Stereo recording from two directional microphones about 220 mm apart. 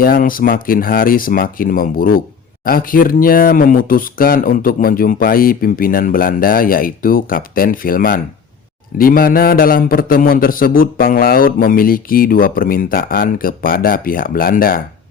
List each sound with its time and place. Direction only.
0.0 s a man's voice: 40° left (ahead or behind)